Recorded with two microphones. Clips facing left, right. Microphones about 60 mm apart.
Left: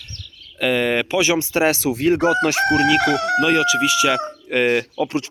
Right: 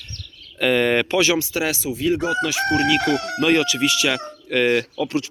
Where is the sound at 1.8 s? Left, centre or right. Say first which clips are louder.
Left 4 dB; left.